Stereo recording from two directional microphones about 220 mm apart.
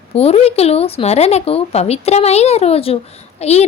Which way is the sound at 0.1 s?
25° left (ahead or behind).